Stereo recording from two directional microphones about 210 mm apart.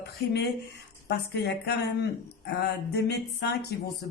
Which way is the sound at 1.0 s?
55° left (ahead or behind).